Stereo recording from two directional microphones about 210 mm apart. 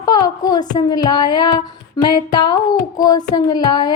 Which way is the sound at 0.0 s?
20° left (ahead or behind).